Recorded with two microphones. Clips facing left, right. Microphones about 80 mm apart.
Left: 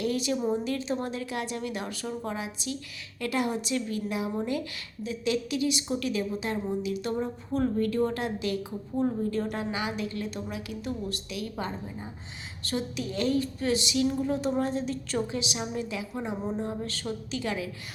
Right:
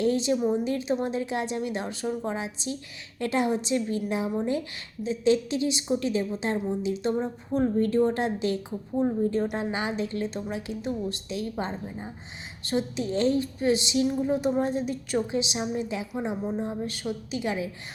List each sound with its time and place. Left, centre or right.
0.0 s a woman's voice: right
5.0 s a woman's voice: right